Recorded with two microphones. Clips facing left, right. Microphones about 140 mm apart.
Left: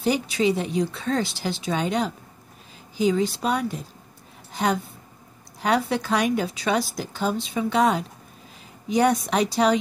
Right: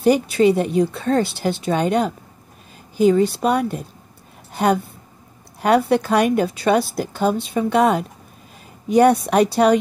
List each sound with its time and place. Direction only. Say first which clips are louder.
0.0 s a woman's voice: right 7 dB; 55° right (ahead or behind)
4.5 s a sound: right 6 dB; 60° right (ahead or behind)
5.6 s a woman's voice: right 7 dB; 60° right (ahead or behind)